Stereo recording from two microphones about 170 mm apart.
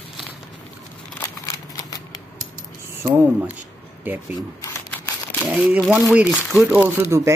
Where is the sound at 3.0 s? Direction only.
10° right (ahead or behind).